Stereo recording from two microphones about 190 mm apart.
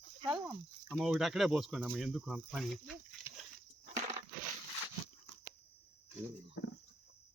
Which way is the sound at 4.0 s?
40° right (ahead or behind).